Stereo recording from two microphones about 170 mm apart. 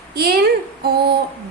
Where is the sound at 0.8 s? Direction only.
70° right (ahead or behind).